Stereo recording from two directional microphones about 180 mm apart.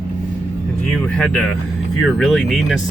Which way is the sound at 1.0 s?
5° left (ahead or behind).